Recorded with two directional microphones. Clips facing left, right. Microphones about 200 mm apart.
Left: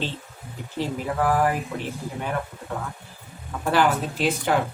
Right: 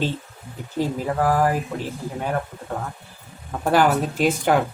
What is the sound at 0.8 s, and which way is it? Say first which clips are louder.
Speech: right 3 dB; 40° right (ahead or behind).